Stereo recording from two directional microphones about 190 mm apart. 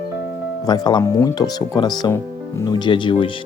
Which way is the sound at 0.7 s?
20° left (ahead or behind).